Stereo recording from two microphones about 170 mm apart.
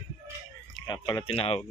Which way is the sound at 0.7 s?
25° left (ahead or behind).